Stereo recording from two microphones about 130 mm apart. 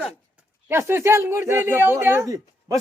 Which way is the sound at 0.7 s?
20° right (ahead or behind).